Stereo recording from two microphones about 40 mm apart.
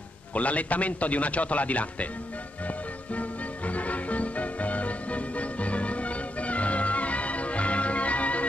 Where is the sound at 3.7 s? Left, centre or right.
Left.